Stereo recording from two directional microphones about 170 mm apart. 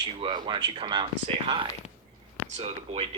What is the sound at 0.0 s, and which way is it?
Speech, 25° right (ahead or behind).